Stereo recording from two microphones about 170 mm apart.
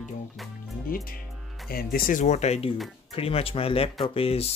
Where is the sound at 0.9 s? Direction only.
60° left (ahead or behind).